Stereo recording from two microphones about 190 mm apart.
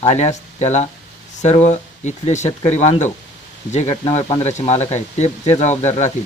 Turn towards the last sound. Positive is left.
turn(degrees=35)  # may be behind; listen again after turning